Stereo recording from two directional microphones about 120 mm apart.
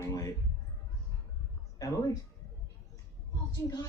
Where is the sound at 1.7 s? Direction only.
30° left (ahead or behind).